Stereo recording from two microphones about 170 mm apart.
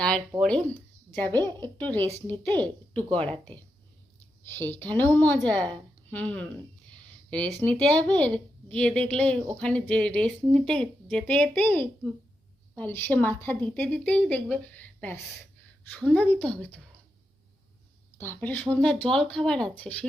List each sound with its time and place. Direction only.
0.4 s speech: 5° left (ahead or behind)
1.4 s a woman's voice: 25° right (ahead or behind)
1.8 s a woman's voice: 10° left (ahead or behind)
4.4 s a woman's voice: 10° left (ahead or behind)
18.2 s a woman's voice: 10° left (ahead or behind)